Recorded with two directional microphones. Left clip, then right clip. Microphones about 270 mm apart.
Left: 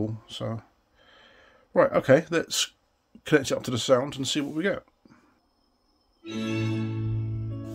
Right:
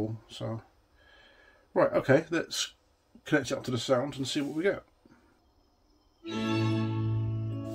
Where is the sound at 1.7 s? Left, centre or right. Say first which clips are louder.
Left 5 dB; left.